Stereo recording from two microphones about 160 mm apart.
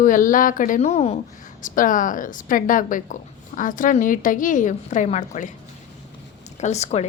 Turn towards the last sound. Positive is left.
turn(degrees=45)  # may be behind; listen again after turning